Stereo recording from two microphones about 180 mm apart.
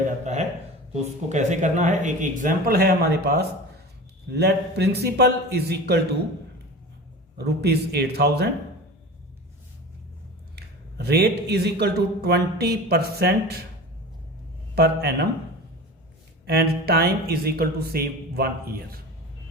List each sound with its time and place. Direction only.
1.3 s speech: 40° right (ahead or behind); by 6.0 s 65° right (ahead or behind)
7.3 s speech: 65° right (ahead or behind)
10.9 s speech: 65° right (ahead or behind)
14.8 s speech: 60° right (ahead or behind)
16.5 s speech: 60° right (ahead or behind)